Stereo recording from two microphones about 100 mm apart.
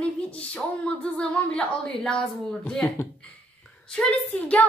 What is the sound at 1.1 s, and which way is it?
Speech, 10° left (ahead or behind).